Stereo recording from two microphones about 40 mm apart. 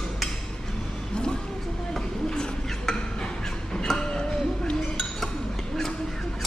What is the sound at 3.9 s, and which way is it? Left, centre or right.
Chink, centre.